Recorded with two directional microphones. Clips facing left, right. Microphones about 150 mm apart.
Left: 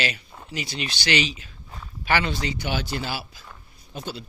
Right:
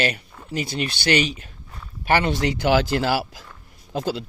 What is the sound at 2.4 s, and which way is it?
Speech, 90° right.